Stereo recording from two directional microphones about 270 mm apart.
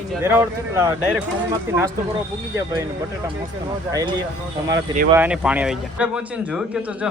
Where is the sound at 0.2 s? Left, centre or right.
Centre.